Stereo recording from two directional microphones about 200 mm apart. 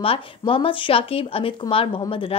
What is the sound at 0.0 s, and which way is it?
Speech, 25° left (ahead or behind).